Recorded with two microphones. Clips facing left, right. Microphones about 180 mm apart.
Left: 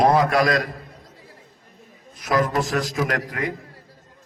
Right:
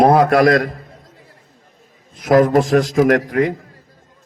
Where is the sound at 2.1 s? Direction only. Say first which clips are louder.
Right 9 dB; 50° right (ahead or behind).